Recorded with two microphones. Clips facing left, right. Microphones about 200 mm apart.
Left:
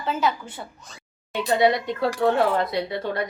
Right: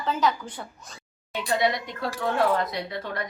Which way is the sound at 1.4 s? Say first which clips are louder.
Left 5 dB; 30° left (ahead or behind).